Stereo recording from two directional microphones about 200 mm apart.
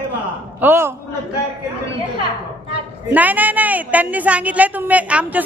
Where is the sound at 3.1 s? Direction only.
10° right (ahead or behind).